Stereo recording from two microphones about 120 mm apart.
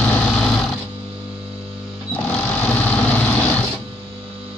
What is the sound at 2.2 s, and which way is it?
Vehicle, 10° left (ahead or behind).